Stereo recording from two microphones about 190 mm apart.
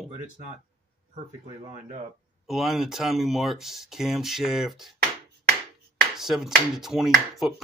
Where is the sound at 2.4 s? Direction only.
Centre (ahead or behind).